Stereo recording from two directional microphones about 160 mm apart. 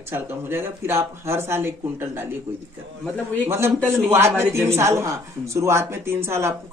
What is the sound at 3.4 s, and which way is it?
Speech, 15° right (ahead or behind).